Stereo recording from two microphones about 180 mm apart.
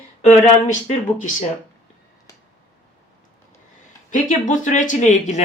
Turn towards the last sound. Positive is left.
turn(degrees=40)  # may be behind; listen again after turning